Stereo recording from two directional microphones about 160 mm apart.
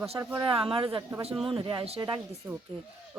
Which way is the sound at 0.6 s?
35° right (ahead or behind).